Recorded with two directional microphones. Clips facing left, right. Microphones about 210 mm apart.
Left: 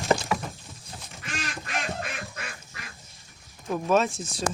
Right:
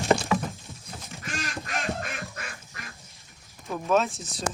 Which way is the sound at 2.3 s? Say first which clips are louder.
Even; 50° right (ahead or behind).